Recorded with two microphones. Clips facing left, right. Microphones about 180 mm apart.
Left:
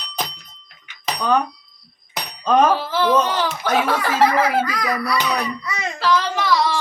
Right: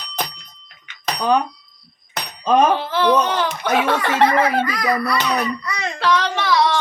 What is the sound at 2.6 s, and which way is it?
A child's voice, centre (ahead or behind).